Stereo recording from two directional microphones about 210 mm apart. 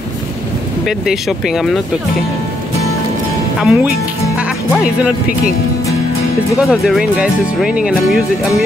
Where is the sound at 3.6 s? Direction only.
5° right (ahead or behind).